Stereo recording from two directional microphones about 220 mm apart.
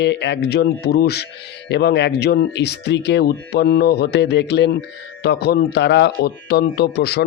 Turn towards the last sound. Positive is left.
turn(degrees=45)  # may be behind; listen again after turning